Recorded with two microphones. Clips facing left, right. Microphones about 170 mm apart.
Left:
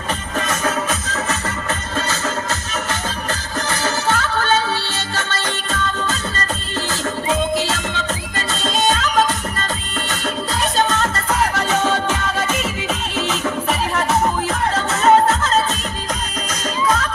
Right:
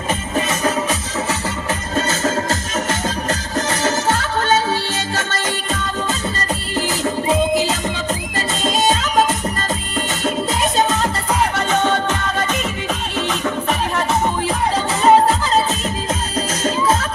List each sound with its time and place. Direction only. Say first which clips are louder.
0.4 s music: even; 15° right (ahead or behind)
2.0 s music: right 6 dB; 40° right (ahead or behind)
3.7 s music: right 1 dB; 40° right (ahead or behind)
6.7 s music: right 4 dB; 15° right (ahead or behind)
11.5 s music: right 1 dB; centre (ahead or behind)
16.6 s music: right 1 dB; 30° right (ahead or behind)